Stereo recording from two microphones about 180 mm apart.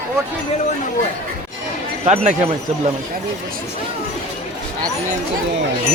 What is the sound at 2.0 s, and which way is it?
Speech, 35° right (ahead or behind).